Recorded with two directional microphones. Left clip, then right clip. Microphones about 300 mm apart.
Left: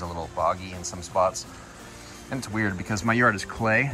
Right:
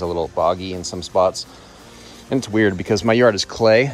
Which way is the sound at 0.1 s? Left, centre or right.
Right.